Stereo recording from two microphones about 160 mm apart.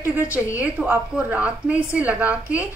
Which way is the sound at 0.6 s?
10° right (ahead or behind).